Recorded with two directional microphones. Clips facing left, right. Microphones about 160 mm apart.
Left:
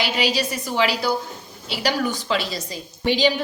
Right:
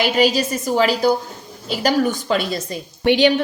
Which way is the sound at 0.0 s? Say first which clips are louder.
Right 6 dB; 45° right (ahead or behind).